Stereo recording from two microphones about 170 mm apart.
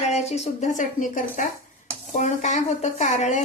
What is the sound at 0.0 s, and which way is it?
A woman's voice, 40° left (ahead or behind).